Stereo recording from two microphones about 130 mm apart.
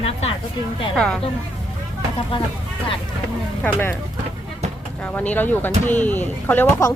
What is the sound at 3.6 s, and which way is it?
Speech, 15° left (ahead or behind).